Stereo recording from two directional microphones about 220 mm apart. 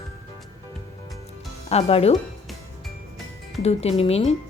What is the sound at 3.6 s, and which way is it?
Speech, 30° left (ahead or behind).